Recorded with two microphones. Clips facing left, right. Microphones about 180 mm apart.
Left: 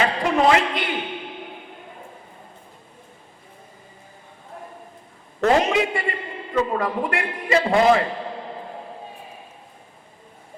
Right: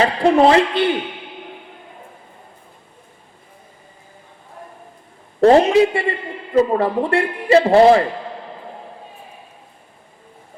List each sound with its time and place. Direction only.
0.0 s a man's voice: 30° right (ahead or behind)
5.4 s a man's voice: 35° right (ahead or behind)